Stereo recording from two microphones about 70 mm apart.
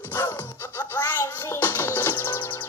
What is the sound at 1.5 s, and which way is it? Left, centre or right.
Music, left.